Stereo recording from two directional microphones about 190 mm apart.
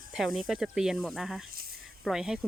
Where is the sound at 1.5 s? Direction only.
55° right (ahead or behind).